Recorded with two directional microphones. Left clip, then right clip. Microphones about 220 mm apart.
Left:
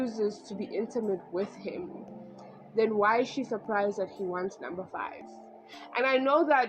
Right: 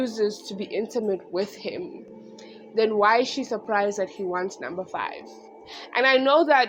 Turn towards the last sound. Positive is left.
turn(degrees=-25)  # may be behind; listen again after turning